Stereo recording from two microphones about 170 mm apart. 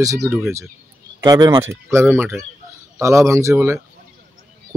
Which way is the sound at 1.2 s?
25° right (ahead or behind).